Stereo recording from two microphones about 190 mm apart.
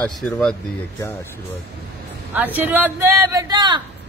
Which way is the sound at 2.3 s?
10° right (ahead or behind).